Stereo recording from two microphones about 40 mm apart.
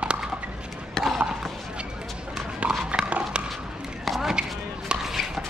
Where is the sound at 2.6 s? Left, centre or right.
Right.